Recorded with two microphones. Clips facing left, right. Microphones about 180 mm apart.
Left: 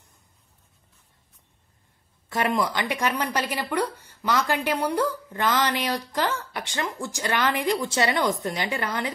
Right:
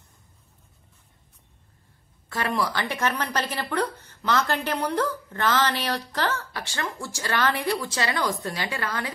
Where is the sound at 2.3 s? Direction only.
20° left (ahead or behind).